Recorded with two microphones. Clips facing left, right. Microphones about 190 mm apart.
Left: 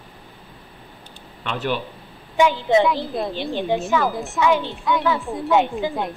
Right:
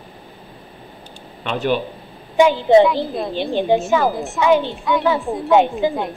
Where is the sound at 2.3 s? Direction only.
30° right (ahead or behind).